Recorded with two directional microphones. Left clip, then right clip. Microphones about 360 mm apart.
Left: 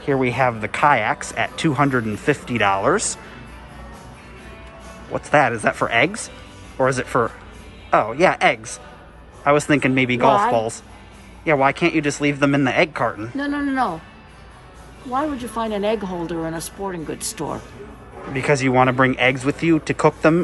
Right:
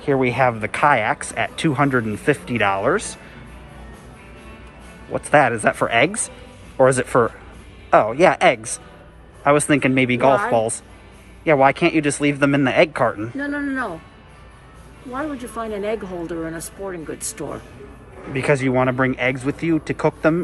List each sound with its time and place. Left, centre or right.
0.0 s speech: centre
5.1 s speech: centre
13.4 s speech: left
15.1 s speech: left
18.3 s speech: centre